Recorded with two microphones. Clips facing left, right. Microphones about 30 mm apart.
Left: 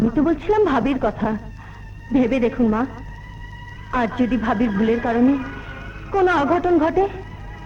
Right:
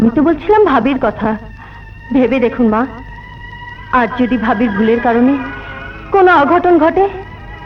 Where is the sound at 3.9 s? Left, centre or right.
Right.